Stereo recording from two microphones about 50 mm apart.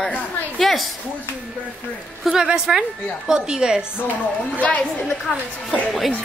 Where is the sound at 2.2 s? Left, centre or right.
Centre.